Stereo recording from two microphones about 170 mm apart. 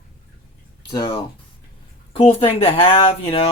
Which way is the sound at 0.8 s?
25° left (ahead or behind).